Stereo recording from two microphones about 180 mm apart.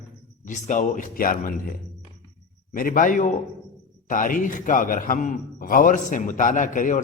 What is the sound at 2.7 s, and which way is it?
A man's voice, 50° left (ahead or behind).